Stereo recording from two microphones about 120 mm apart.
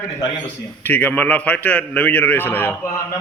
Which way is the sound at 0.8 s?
15° left (ahead or behind).